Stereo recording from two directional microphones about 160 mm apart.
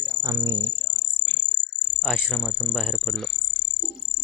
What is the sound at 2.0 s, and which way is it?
Speech, centre (ahead or behind).